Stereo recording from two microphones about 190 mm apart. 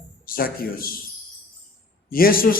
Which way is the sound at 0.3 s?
50° left (ahead or behind).